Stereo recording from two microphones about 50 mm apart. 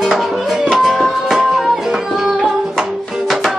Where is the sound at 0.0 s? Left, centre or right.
Centre.